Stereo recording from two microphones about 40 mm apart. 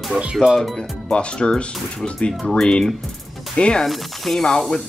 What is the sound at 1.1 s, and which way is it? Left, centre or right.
Speech, left.